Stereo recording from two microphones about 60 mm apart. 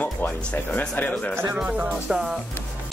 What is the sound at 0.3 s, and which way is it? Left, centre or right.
Speech, centre.